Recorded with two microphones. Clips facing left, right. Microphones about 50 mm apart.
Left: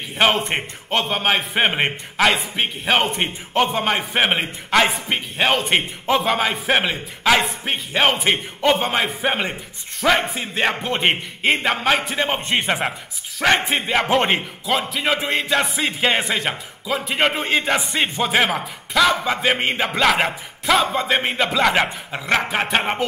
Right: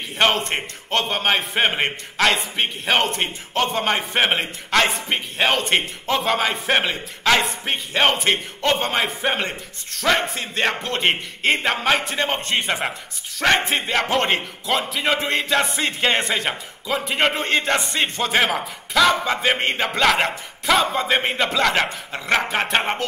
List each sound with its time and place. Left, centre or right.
0.2 s a man's voice: centre